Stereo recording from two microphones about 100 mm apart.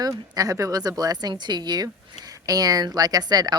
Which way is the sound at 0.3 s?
35° right (ahead or behind).